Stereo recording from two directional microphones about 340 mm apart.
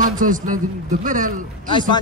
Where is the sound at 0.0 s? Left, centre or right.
Right.